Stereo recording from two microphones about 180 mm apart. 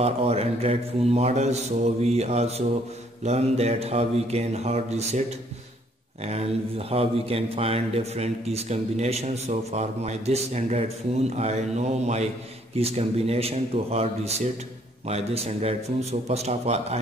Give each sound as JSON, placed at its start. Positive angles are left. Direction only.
{"t": 0.0, "sound": "a man's voice", "side_deg": -35}
{"t": 6.2, "sound": "a man's voice", "side_deg": -35}